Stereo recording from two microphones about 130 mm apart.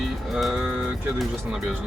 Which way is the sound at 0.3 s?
Centre (ahead or behind).